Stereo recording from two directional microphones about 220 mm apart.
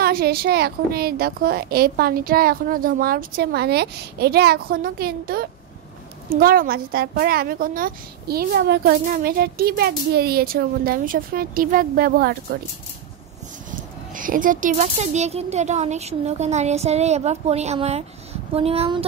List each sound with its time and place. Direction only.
0.0 s a woman's voice: 45° right (ahead or behind)
13.7 s speech: 40° right (ahead or behind)